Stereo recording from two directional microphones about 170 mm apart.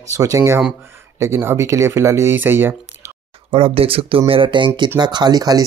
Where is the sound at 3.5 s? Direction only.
35° right (ahead or behind).